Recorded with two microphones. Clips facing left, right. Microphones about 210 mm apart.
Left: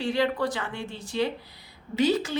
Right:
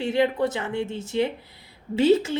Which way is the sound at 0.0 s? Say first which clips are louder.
Right 3 dB; 25° right (ahead or behind).